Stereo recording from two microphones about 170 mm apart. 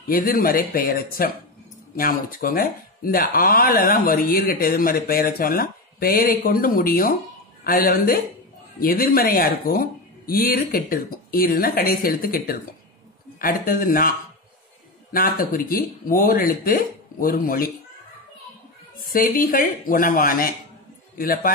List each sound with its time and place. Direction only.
0.1 s speech: 60° left (ahead or behind)
15.1 s speech: 55° left (ahead or behind)
18.9 s speech: 60° left (ahead or behind)